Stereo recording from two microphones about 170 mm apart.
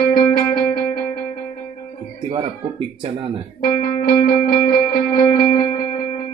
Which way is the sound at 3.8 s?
60° left (ahead or behind).